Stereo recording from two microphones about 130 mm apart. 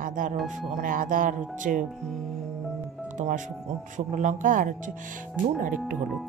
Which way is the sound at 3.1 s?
70° right (ahead or behind).